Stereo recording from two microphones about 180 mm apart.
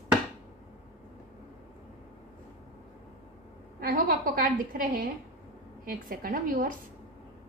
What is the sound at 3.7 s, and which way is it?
A woman's voice, 55° right (ahead or behind).